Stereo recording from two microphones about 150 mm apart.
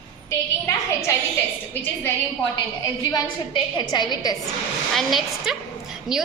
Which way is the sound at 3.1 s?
25° left (ahead or behind).